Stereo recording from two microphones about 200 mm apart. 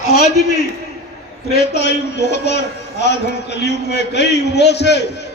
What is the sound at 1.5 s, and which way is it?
A man's voice, 55° left (ahead or behind).